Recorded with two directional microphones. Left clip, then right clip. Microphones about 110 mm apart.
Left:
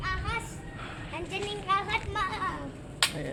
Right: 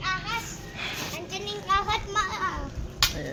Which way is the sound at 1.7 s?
30° right (ahead or behind).